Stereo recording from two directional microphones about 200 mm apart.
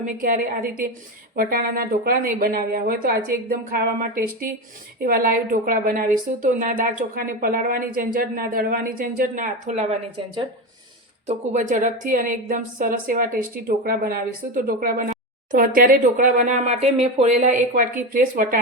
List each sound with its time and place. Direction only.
0.0 s a woman's voice: 45° right (ahead or behind)
11.3 s a woman's voice: 40° right (ahead or behind)